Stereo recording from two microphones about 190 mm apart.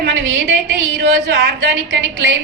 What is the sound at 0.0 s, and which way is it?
A woman's voice, 60° right (ahead or behind).